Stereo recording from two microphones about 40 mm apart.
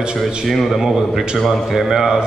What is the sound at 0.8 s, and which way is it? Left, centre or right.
Speech, centre.